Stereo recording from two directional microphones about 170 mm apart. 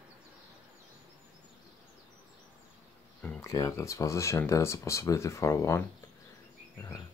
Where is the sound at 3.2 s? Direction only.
20° left (ahead or behind).